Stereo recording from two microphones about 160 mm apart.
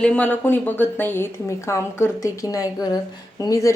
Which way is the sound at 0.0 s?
10° left (ahead or behind).